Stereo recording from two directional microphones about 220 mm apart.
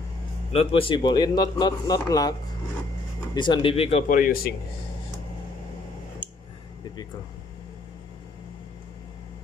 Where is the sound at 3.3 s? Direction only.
20° left (ahead or behind); by 4.5 s 40° left (ahead or behind).